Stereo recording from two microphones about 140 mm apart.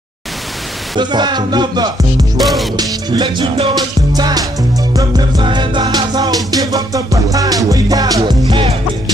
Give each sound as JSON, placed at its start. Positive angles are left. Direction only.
{"t": 0.9, "sound": "music", "side_deg": -30}
{"t": 2.3, "sound": "music", "side_deg": 0}
{"t": 2.8, "sound": "music", "side_deg": -30}